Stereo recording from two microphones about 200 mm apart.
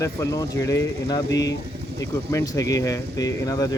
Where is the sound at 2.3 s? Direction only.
15° left (ahead or behind).